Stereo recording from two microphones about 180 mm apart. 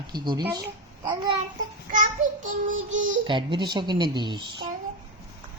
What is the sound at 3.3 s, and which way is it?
A child's voice, 25° right (ahead or behind).